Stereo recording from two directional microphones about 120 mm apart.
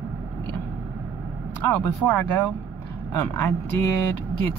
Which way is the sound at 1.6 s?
20° left (ahead or behind).